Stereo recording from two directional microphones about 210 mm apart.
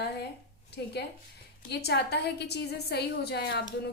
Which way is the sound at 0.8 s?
50° left (ahead or behind).